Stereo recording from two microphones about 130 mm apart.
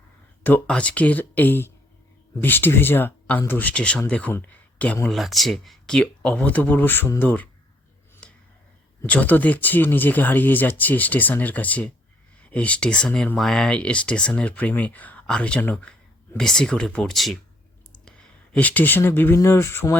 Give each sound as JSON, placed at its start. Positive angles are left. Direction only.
{"t": 0.4, "sound": "speech", "side_deg": 10}
{"t": 5.0, "sound": "speech", "side_deg": 0}
{"t": 9.0, "sound": "speech", "side_deg": 10}
{"t": 18.0, "sound": "a sound", "side_deg": 10}
{"t": 19.4, "sound": "speech", "side_deg": 20}